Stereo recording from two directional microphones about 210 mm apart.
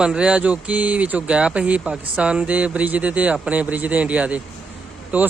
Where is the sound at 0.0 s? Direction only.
5° right (ahead or behind).